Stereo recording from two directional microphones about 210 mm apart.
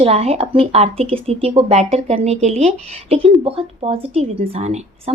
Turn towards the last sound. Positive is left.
turn(degrees=-30)  # may be behind; listen again after turning